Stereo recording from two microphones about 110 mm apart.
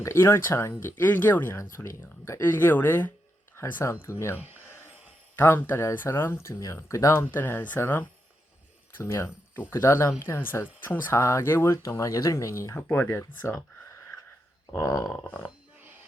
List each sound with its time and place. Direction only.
0.0 s speech: 25° left (ahead or behind)
4.4 s speech: 15° right (ahead or behind)
5.4 s speech: 20° left (ahead or behind)
14.8 s grunt: 35° left (ahead or behind)
15.1 s a sound: 15° left (ahead or behind)